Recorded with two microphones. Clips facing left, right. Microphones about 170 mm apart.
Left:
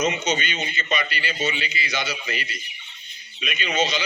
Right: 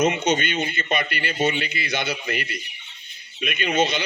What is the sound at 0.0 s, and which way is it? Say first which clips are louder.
A man's voice: right 3 dB; 55° right (ahead or behind).